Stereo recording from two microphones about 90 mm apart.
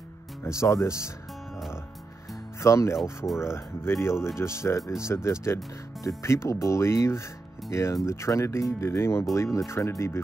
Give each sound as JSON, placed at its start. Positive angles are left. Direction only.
{"t": 0.4, "sound": "speech", "side_deg": 35}
{"t": 2.6, "sound": "speech", "side_deg": 35}